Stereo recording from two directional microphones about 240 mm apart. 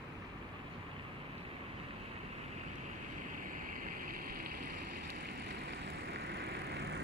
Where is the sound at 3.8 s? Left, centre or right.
Right.